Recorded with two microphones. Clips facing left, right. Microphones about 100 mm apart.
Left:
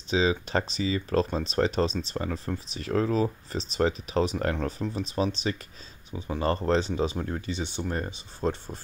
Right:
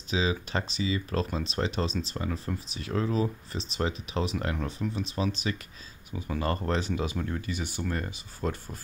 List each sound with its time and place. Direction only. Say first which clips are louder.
0.1 s speech: left 4 dB; 35° left (ahead or behind)